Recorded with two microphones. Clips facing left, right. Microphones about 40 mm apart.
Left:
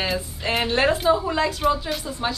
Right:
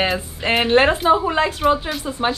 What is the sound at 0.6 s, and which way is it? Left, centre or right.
Speech, right.